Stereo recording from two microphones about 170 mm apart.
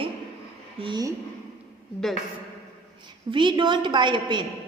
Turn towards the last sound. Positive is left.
turn(degrees=-25)  # may be behind; listen again after turning